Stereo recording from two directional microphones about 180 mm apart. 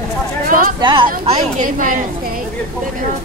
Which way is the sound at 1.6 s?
45° right (ahead or behind).